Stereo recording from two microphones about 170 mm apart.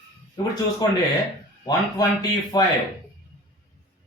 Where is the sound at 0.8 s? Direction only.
25° left (ahead or behind).